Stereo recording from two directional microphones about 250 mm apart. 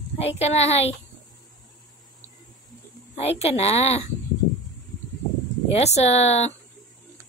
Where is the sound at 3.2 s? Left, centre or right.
Left.